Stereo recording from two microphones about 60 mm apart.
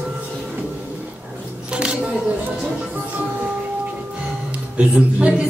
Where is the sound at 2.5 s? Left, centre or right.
Right.